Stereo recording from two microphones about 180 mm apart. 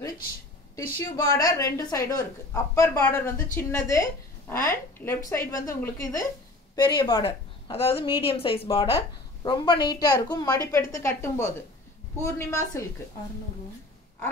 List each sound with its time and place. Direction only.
0.9 s a woman's voice: 15° left (ahead or behind)